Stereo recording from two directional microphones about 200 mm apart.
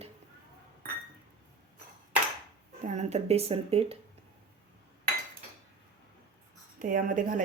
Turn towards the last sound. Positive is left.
turn(degrees=-40)  # may be behind; listen again after turning